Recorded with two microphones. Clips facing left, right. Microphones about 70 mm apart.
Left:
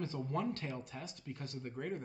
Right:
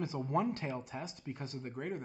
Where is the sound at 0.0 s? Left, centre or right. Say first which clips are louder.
Right 4 dB; centre.